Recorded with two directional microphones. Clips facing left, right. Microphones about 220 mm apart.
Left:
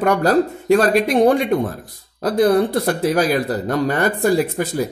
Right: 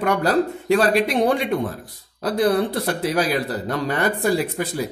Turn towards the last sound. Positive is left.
turn(degrees=45)  # may be behind; listen again after turning